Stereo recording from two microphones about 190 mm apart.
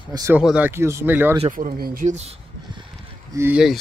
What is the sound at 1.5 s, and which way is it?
Speech, 45° right (ahead or behind).